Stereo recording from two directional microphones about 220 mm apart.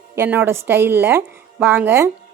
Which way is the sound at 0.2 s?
10° right (ahead or behind).